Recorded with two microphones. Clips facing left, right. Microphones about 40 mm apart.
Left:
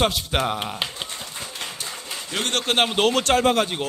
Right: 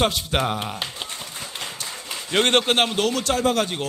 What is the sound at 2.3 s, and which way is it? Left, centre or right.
Speech, right.